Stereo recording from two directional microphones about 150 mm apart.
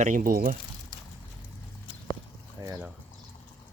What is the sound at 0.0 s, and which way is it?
Speech, 65° right (ahead or behind).